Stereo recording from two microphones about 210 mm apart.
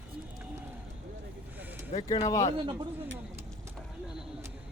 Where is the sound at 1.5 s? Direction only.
10° right (ahead or behind).